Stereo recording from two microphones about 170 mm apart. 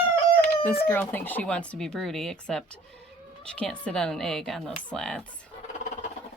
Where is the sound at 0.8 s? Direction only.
10° left (ahead or behind).